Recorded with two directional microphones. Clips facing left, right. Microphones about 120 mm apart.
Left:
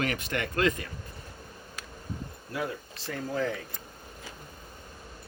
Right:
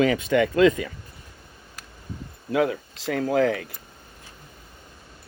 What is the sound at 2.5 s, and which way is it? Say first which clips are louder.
Speech: right 11 dB; 90° right.